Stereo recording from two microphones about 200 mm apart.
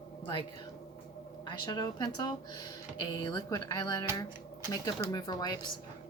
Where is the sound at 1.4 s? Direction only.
20° left (ahead or behind).